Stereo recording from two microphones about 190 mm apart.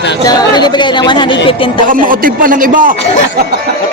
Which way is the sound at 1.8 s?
45° right (ahead or behind).